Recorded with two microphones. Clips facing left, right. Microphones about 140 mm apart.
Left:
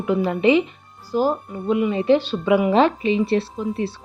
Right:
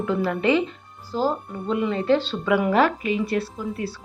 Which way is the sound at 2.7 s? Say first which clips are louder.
Left 3 dB; 25° left (ahead or behind).